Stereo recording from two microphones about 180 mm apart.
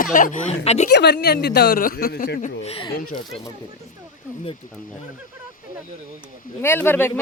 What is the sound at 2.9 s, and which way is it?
Speech, 50° left (ahead or behind).